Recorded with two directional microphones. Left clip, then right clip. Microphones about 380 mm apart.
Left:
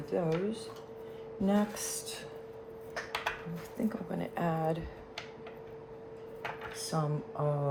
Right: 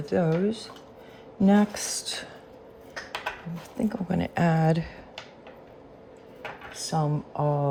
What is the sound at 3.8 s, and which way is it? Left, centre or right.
Speech, right.